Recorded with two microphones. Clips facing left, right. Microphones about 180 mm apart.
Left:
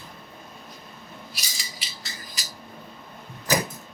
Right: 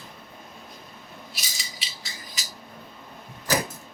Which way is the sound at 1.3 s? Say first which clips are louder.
Even; centre (ahead or behind).